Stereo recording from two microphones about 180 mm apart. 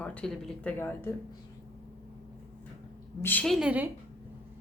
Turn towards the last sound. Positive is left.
turn(degrees=-5)  # may be behind; listen again after turning